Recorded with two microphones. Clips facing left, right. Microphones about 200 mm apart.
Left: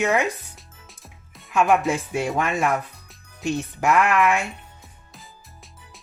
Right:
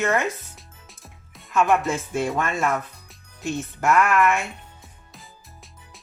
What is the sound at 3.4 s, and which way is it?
Speech, 15° left (ahead or behind).